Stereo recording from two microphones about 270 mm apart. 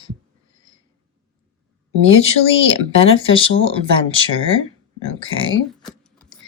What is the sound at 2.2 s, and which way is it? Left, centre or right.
Speech, left.